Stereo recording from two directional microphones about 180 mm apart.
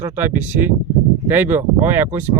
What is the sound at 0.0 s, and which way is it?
Speech, 10° right (ahead or behind).